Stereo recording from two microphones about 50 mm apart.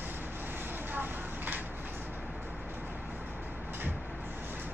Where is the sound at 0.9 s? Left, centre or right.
Right.